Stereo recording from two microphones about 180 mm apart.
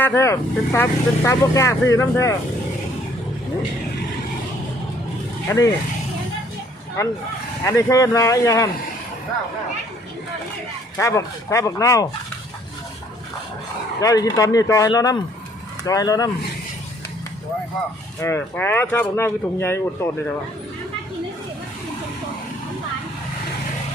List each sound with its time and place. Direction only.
0.0 s speech: 15° left (ahead or behind)
5.5 s speech: 20° left (ahead or behind)
7.6 s speech: 20° left (ahead or behind)
10.9 s speech: 15° left (ahead or behind)
14.0 s speech: 20° left (ahead or behind)
18.2 s speech: 15° left (ahead or behind)